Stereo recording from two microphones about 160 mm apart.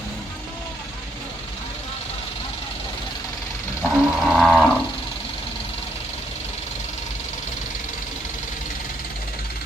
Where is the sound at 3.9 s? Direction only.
Centre (ahead or behind).